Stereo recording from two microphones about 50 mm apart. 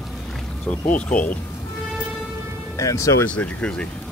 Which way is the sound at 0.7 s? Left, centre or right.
Left.